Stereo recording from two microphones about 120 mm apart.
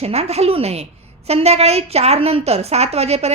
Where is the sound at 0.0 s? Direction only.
60° right (ahead or behind).